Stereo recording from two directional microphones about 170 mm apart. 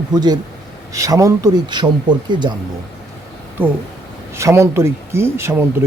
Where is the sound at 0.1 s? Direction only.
25° right (ahead or behind).